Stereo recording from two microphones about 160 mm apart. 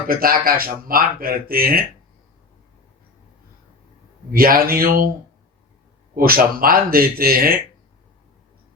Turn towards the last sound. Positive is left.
turn(degrees=-65)  # may be behind; listen again after turning